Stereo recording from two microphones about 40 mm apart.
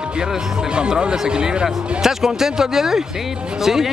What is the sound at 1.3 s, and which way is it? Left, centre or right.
Speech, right.